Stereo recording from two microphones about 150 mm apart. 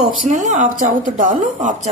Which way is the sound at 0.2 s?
55° right (ahead or behind).